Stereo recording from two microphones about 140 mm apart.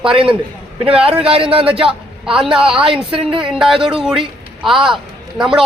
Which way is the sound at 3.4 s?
5° right (ahead or behind).